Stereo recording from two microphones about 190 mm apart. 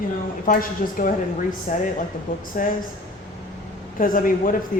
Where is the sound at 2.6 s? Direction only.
45° left (ahead or behind).